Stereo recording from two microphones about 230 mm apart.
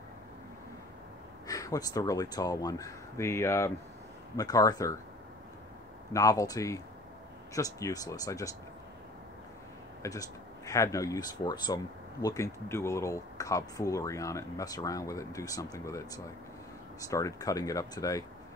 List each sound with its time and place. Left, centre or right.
1.5 s speech: centre
6.1 s speech: centre
10.0 s speech: centre